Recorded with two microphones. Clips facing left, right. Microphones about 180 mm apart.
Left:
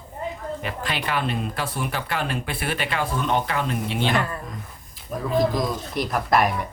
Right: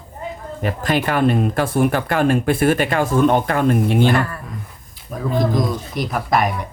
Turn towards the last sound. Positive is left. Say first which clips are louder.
# right 2 dB
turn(degrees=0)  # may be behind; listen again after turning